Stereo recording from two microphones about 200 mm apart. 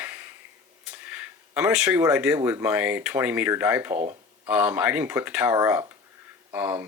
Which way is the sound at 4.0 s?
35° right (ahead or behind).